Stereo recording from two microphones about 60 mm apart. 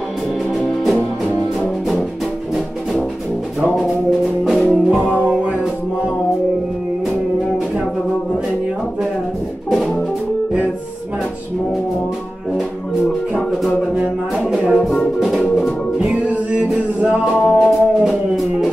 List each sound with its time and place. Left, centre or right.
4.5 s music: centre
14.4 s music: centre
16.5 s music: right
17.6 s music: centre